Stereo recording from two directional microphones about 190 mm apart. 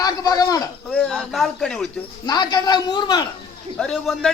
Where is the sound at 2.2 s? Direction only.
20° left (ahead or behind).